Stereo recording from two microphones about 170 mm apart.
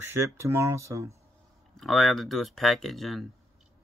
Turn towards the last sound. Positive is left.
turn(degrees=0)  # may be behind; listen again after turning